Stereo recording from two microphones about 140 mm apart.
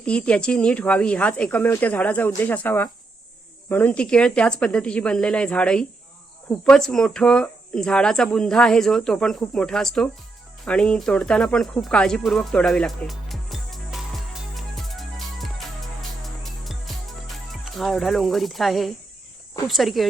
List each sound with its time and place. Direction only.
0.0 s speech: 10° left (ahead or behind)
10.7 s a sound: 5° left (ahead or behind)
16.2 s music: centre (ahead or behind)
19.6 s speech: centre (ahead or behind)